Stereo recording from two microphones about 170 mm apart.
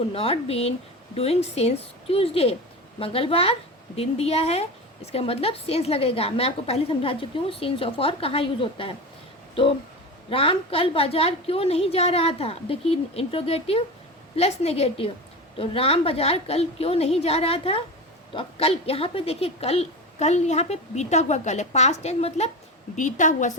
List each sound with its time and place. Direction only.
0.1 s a woman's voice: 35° left (ahead or behind)
10.2 s a woman's voice: 35° left (ahead or behind)